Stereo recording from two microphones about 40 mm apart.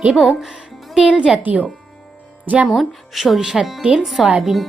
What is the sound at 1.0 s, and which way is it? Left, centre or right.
Speech, right.